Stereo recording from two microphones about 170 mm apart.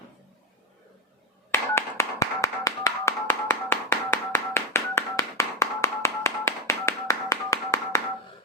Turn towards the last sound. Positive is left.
turn(degrees=20)  # may be behind; listen again after turning